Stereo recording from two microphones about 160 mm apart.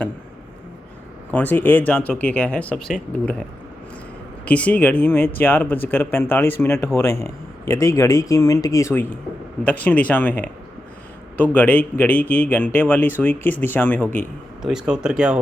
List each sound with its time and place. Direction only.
1.3 s speech: 10° left (ahead or behind)
4.4 s speech: 10° left (ahead or behind)
11.5 s speech: 10° left (ahead or behind)
14.6 s speech: 5° right (ahead or behind)